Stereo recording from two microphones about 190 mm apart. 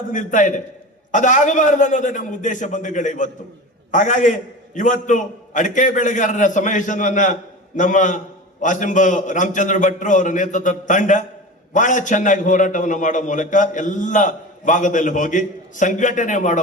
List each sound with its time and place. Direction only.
0.1 s a man's voice: 40° left (ahead or behind)